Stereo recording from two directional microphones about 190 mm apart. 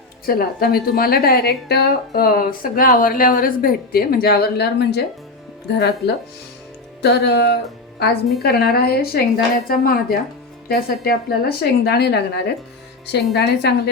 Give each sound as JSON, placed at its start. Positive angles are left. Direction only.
{"t": 0.3, "sound": "a woman's voice", "side_deg": 50}
{"t": 7.0, "sound": "music", "side_deg": 60}
{"t": 8.4, "sound": "a woman's voice", "side_deg": 55}